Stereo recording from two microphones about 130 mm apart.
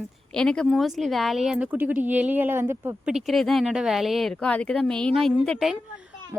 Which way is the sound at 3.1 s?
Centre (ahead or behind).